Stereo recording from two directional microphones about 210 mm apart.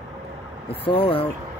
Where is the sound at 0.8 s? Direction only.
25° left (ahead or behind).